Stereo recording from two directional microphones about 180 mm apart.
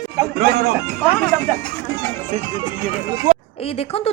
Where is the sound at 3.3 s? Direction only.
45° right (ahead or behind).